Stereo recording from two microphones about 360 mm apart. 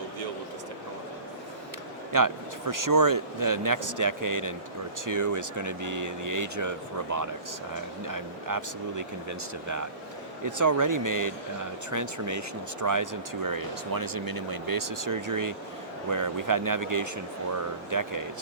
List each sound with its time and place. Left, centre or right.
2.1 s speech: right
10.4 s speech: right